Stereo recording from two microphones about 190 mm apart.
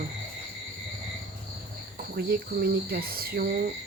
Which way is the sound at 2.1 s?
55° right (ahead or behind).